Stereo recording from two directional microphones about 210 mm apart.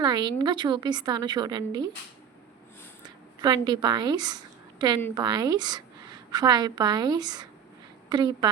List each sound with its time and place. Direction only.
0.0 s speech: 20° right (ahead or behind)
3.4 s a woman's voice: 20° right (ahead or behind)